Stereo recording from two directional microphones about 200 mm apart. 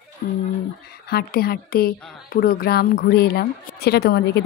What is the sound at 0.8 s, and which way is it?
A woman's voice, 50° left (ahead or behind).